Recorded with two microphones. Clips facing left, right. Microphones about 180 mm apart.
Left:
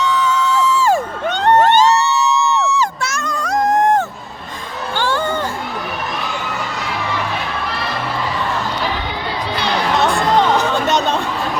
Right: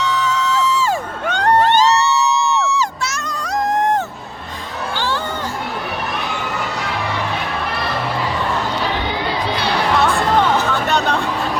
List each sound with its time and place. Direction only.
0.6 s music: 50° left (ahead or behind)
4.9 s a sound: 50° left (ahead or behind)
10.0 s music: 15° left (ahead or behind)